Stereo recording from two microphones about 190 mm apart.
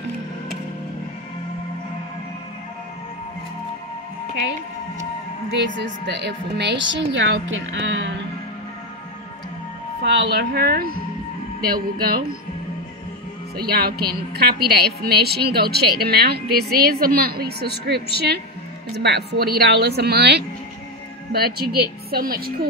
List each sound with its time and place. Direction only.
6.0 s a woman's voice: 65° right (ahead or behind)
10.0 s a woman's voice: 65° right (ahead or behind)
13.6 s a woman's voice: 55° right (ahead or behind)